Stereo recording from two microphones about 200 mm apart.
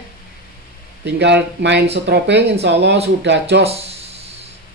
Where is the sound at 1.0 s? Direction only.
60° right (ahead or behind).